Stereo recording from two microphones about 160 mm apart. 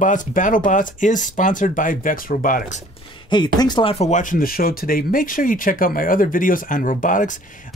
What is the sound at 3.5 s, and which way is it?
Speech, 25° left (ahead or behind).